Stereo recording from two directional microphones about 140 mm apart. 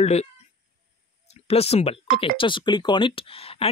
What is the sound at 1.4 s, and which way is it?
Speech, 45° left (ahead or behind).